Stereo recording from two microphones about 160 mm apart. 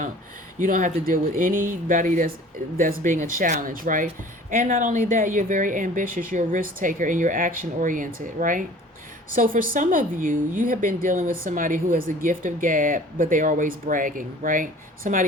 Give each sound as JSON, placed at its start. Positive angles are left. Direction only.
{"t": 0.6, "sound": "a woman's voice", "side_deg": -55}